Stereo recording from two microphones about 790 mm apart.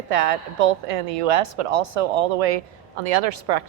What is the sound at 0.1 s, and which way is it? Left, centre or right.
A woman's voice, right.